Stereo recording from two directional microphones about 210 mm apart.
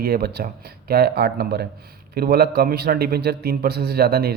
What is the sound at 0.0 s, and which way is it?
A man's voice, 50° right (ahead or behind).